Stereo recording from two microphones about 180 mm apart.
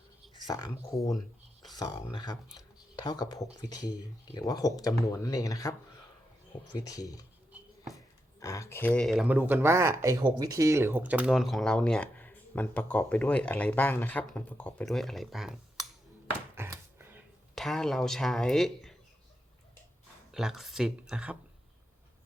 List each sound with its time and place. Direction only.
0.4 s speech: 20° left (ahead or behind)
2.9 s speech: 20° left (ahead or behind)
6.7 s speech: 20° left (ahead or behind); by 15.9 s centre (ahead or behind)
16.6 s a sound: 15° right (ahead or behind)
17.5 s speech: centre (ahead or behind)
20.3 s speech: centre (ahead or behind)